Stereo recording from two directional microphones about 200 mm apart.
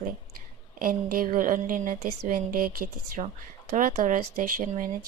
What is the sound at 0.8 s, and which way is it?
Speech, 45° right (ahead or behind).